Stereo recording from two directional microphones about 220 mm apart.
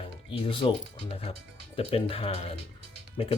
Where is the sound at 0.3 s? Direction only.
20° left (ahead or behind).